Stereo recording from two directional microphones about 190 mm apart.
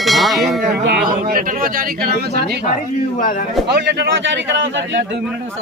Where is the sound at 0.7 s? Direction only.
55° right (ahead or behind).